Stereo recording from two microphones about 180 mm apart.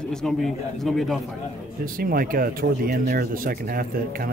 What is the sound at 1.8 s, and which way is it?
Speech, 55° right (ahead or behind).